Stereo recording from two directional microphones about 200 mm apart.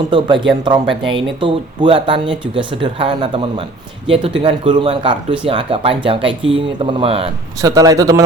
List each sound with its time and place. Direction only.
0.1 s speech: 25° right (ahead or behind)
7.6 s speech: 20° right (ahead or behind)